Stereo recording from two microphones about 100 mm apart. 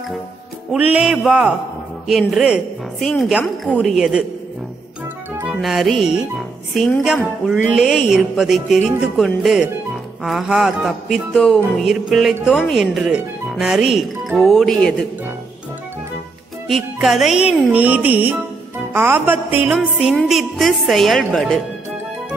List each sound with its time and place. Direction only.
0.7 s music: 10° right (ahead or behind)
2.0 s speech: 5° right (ahead or behind)
5.5 s speech: centre (ahead or behind)
16.6 s speech: centre (ahead or behind)
17.6 s music: 15° right (ahead or behind)
19.8 s music: 5° right (ahead or behind)
20.2 s speech: centre (ahead or behind)